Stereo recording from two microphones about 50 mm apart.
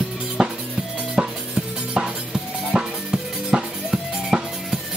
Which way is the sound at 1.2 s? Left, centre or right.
Right.